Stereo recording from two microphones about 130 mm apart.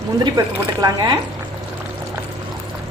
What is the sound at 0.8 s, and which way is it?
Speech, 30° right (ahead or behind).